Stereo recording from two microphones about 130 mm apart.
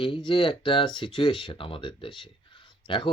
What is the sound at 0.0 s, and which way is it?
Speech, 40° left (ahead or behind).